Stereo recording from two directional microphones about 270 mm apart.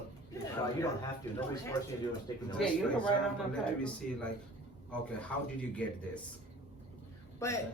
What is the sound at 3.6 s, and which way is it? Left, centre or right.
Speech, centre.